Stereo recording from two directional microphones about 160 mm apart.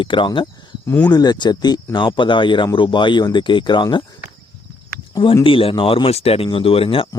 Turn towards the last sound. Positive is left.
turn(degrees=35)  # may be behind; listen again after turning